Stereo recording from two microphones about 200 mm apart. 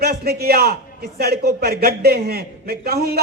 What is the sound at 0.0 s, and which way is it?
A man's voice, 50° right (ahead or behind).